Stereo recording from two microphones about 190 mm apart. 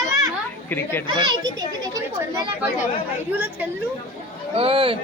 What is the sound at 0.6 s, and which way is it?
Speech, 10° left (ahead or behind).